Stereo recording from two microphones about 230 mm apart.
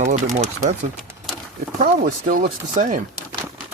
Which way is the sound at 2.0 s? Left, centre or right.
Right.